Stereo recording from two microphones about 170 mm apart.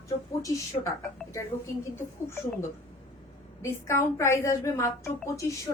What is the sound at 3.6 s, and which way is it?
A woman's voice, 15° left (ahead or behind).